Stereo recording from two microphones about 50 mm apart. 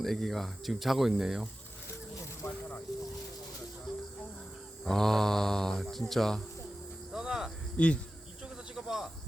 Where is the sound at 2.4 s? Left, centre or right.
Left.